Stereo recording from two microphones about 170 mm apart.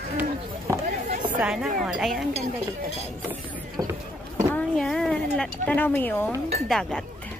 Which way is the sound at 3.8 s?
20° right (ahead or behind).